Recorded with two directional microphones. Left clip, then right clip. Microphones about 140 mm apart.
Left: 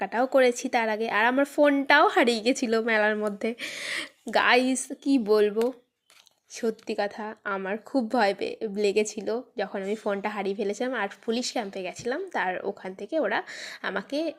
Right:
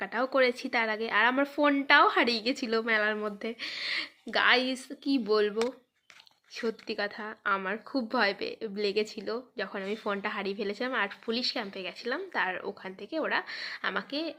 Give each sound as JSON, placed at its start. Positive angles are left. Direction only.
{"t": 0.0, "sound": "a woman's voice", "side_deg": 40}
{"t": 3.3, "sound": "speech", "side_deg": 60}